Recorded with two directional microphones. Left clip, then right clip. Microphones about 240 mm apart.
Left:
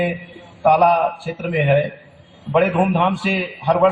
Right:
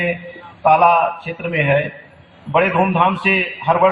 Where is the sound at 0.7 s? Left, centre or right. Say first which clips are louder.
Right 2 dB; left.